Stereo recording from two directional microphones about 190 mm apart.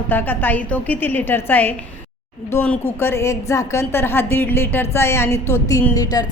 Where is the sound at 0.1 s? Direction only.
10° left (ahead or behind).